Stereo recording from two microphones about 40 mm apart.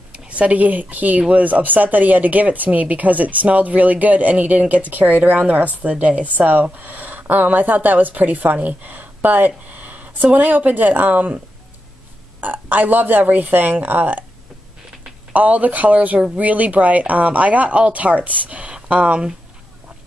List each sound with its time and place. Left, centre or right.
0.1 s a woman's voice: right
15.3 s speech: right